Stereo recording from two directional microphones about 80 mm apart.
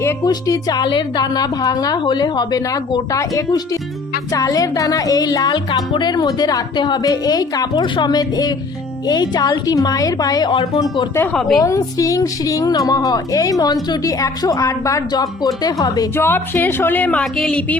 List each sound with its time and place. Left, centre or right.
0.3 s a woman's voice: left
5.9 s speech: left
6.1 s speech: left
6.7 s speech: left
7.0 s a woman's voice: left
11.5 s speech: left
15.1 s speech: left
16.1 s a woman's voice: left; by 17.7 s centre